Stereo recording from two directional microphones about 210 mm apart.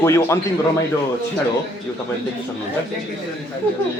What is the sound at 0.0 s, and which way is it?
Speech, 10° left (ahead or behind).